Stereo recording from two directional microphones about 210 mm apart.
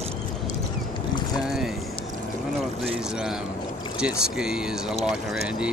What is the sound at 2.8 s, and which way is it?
Speech, centre (ahead or behind).